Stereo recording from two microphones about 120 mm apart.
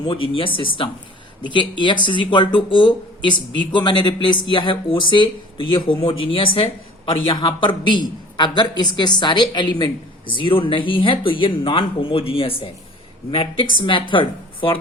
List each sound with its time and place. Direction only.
0.0 s speech: 45° left (ahead or behind)